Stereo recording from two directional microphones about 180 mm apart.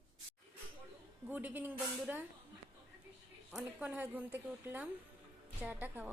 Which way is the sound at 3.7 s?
10° right (ahead or behind).